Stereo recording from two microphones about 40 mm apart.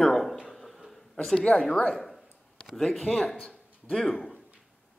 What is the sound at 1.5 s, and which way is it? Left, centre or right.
Speech, left.